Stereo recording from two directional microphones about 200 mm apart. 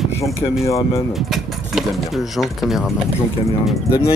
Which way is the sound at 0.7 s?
15° left (ahead or behind).